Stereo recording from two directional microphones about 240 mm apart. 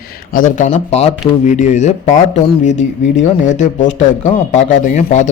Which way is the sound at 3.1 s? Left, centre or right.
Left.